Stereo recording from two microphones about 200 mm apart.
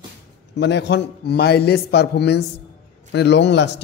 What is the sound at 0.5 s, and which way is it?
A man's voice, 60° left (ahead or behind).